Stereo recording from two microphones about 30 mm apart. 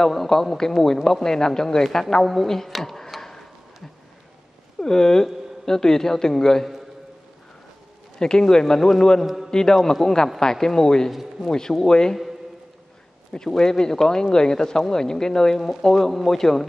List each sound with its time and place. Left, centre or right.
0.3 s a man's voice: centre
3.2 s a sound: centre
4.7 s a man's voice: centre
8.2 s speech: left
9.2 s a man's voice: centre
9.5 s a man's voice: left
13.6 s speech: left
15.9 s a man's voice: centre